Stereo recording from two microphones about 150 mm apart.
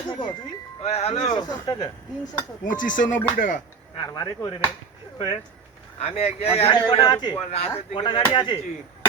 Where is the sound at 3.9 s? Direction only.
25° left (ahead or behind).